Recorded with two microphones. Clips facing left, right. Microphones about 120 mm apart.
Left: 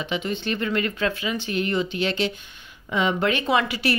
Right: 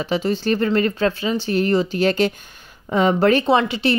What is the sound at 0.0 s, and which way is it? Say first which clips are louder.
Speech: right 6 dB; 35° right (ahead or behind).